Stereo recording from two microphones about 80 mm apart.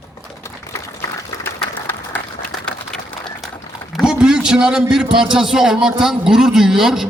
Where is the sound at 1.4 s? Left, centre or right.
Left.